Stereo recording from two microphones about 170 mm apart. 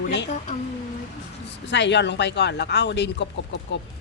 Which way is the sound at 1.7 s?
90° left.